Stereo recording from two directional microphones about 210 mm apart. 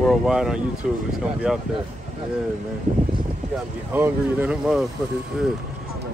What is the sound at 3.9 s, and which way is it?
Speech, 10° right (ahead or behind).